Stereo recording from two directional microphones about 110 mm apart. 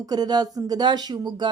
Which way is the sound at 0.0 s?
35° right (ahead or behind).